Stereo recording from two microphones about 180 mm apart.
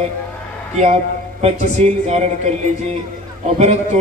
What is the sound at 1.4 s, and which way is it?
A man's voice, 35° right (ahead or behind).